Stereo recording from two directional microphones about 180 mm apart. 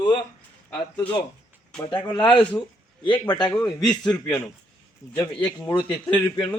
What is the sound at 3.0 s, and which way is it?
Speech, 25° left (ahead or behind).